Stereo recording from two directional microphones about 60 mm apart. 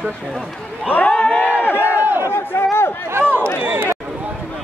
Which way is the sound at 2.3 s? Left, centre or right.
Left.